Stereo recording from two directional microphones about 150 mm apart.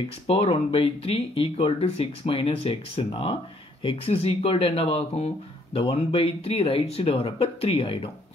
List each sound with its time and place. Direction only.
0.3 s speech: 40° left (ahead or behind)